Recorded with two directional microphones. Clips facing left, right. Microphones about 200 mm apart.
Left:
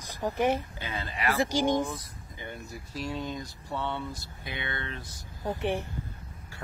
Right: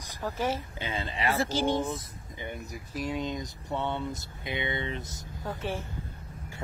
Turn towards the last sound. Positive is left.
turn(degrees=20)  # may be behind; listen again after turning